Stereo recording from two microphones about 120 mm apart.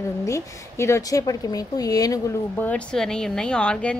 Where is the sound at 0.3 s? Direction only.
25° left (ahead or behind).